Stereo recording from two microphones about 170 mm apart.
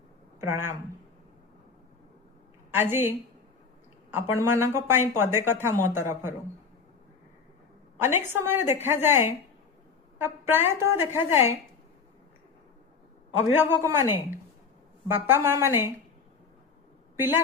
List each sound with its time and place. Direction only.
0.3 s speech: 15° right (ahead or behind)
2.7 s speech: 15° right (ahead or behind)
7.9 s speech: 15° right (ahead or behind)
13.6 s speech: 15° right (ahead or behind)
15.0 s speech: 15° right (ahead or behind)
17.2 s speech: 15° right (ahead or behind)